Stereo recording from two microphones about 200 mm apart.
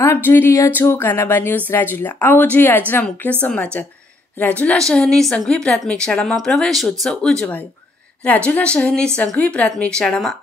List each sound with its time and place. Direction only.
0.0 s a woman's voice: 10° left (ahead or behind)